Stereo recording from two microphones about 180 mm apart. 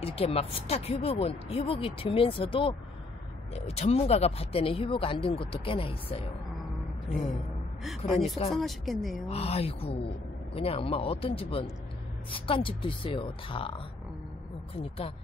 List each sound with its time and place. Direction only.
0.0 s speech: 35° left (ahead or behind)
7.8 s speech: centre (ahead or behind)
9.3 s speech: 35° left (ahead or behind)